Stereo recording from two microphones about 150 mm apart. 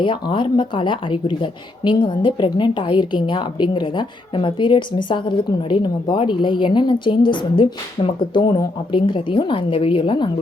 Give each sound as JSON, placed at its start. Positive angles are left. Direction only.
{"t": 0.0, "sound": "speech", "side_deg": 35}